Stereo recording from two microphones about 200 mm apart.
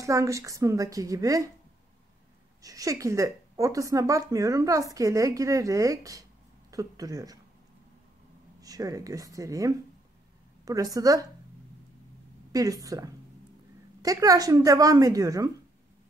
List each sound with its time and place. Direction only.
0.0 s speech: 15° right (ahead or behind)
2.6 s speech: 15° right (ahead or behind)
8.5 s speech: 15° right (ahead or behind)
12.5 s speech: 15° right (ahead or behind)